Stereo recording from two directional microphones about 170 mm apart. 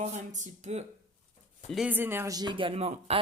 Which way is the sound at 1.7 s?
5° right (ahead or behind).